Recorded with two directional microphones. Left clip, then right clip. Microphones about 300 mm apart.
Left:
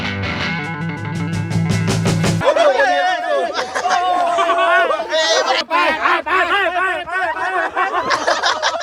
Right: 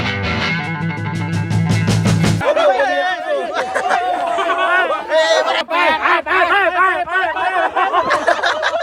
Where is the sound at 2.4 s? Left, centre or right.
Left.